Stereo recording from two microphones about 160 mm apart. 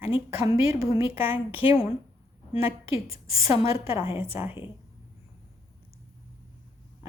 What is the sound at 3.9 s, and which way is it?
Speech, 35° left (ahead or behind).